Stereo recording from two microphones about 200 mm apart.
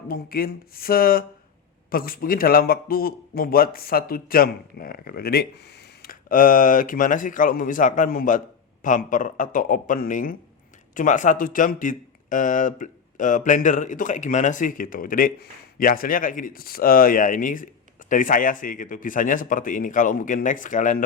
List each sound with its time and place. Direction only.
0.1 s a man's voice: 50° left (ahead or behind)